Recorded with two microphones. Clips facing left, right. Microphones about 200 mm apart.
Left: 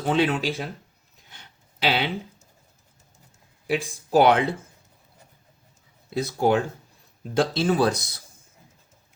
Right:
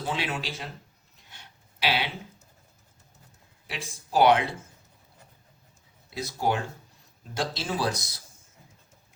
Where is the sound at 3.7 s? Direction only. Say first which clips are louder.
Left 8 dB; 55° left (ahead or behind).